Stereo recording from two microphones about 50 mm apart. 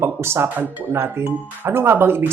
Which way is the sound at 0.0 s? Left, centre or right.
Right.